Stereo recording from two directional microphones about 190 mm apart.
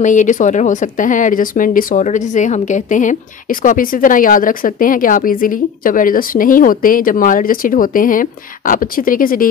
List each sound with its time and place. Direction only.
0.0 s speech: 40° left (ahead or behind)